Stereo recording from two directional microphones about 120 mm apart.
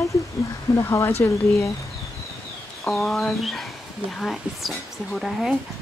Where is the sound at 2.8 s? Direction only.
Centre (ahead or behind).